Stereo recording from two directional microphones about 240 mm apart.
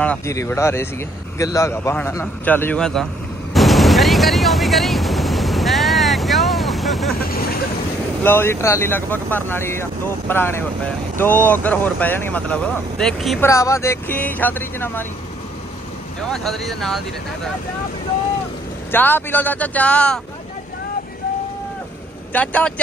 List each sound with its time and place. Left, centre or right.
0.0 s speech: centre
3.5 s a sound: centre
7.2 s vehicle: left
8.2 s speech: centre
13.5 s speech: centre
16.3 s speech: centre
18.9 s speech: centre
22.3 s speech: centre